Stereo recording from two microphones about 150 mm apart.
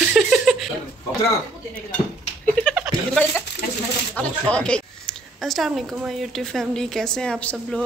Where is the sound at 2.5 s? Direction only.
5° left (ahead or behind).